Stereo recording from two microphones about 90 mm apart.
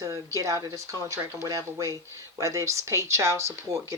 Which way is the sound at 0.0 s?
40° right (ahead or behind).